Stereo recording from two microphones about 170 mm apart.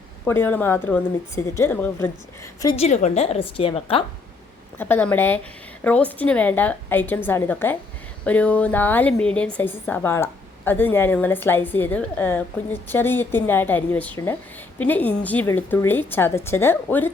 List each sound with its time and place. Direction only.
0.3 s a woman's voice: 10° left (ahead or behind)
2.7 s a woman's voice: 40° left (ahead or behind)
4.8 s a woman's voice: 10° left (ahead or behind)